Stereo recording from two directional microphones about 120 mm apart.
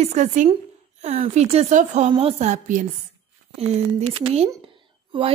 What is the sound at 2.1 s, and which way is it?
Speech, 50° right (ahead or behind).